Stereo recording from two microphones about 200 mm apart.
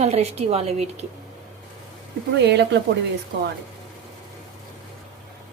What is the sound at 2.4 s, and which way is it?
Speech, 60° right (ahead or behind).